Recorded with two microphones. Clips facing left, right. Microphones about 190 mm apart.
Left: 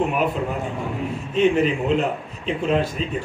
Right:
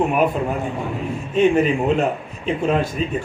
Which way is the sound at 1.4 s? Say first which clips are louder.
Right 2 dB; 50° right (ahead or behind).